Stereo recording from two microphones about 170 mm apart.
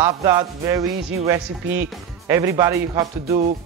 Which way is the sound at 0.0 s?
20° right (ahead or behind).